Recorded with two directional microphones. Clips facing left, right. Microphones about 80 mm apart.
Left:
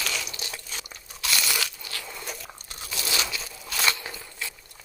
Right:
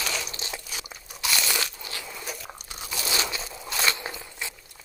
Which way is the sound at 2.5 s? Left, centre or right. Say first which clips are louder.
Right 2 dB; centre.